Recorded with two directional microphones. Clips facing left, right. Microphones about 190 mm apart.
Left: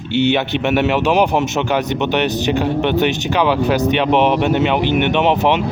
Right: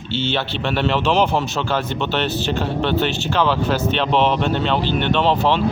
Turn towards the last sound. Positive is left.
turn(degrees=20)  # may be behind; listen again after turning